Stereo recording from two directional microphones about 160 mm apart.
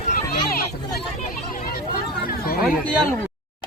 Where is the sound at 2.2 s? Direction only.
70° left (ahead or behind).